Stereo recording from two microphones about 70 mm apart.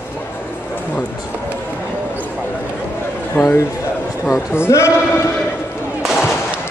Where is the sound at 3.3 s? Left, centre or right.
Left.